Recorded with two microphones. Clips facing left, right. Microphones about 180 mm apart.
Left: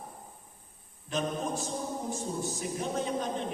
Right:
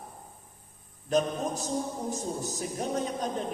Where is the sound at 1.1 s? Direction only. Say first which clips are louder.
Right 4 dB; 40° right (ahead or behind).